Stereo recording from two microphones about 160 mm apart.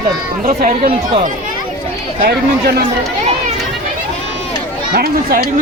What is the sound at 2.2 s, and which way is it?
Speech, 75° right (ahead or behind).